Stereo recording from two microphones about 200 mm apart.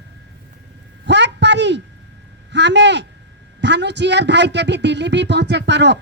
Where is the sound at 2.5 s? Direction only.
60° right (ahead or behind).